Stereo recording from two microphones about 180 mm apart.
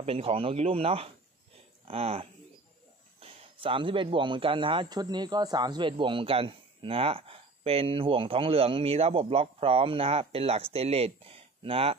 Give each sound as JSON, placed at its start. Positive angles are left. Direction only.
{"t": 0.0, "sound": "speech", "side_deg": -30}